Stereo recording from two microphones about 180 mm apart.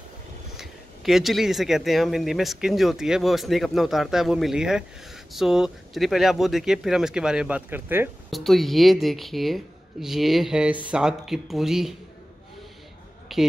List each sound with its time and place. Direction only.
0.6 s speech: centre (ahead or behind)
8.3 s speech: centre (ahead or behind)
13.3 s speech: centre (ahead or behind)